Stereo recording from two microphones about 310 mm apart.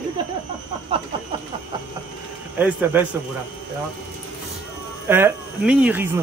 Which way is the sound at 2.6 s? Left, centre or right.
Centre.